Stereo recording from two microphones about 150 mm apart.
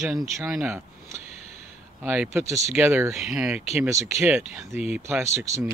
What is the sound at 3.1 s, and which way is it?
Speech, 5° right (ahead or behind).